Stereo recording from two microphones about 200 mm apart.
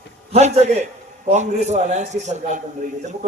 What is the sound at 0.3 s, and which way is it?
A man's voice, 35° right (ahead or behind).